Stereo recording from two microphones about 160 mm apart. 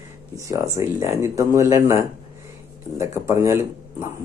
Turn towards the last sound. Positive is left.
turn(degrees=-15)  # may be behind; listen again after turning